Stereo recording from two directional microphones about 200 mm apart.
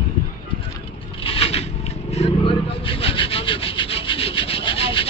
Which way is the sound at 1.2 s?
30° left (ahead or behind).